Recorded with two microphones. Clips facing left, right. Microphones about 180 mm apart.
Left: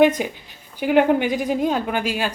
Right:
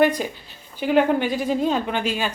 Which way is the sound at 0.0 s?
20° left (ahead or behind).